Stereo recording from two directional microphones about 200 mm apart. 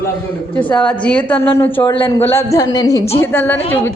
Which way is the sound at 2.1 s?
10° left (ahead or behind).